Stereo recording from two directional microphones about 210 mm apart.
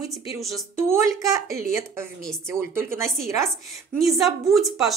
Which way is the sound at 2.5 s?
10° right (ahead or behind).